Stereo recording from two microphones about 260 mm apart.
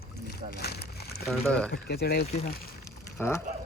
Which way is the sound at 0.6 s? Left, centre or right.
Left.